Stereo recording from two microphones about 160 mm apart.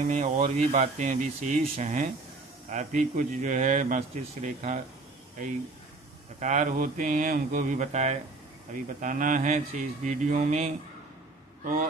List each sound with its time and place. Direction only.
0.0 s speech: 50° right (ahead or behind)
6.4 s speech: 50° right (ahead or behind)
9.0 s speech: 55° right (ahead or behind)